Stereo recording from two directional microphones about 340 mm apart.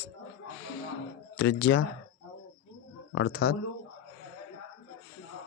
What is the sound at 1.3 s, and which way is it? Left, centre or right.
Speech, left.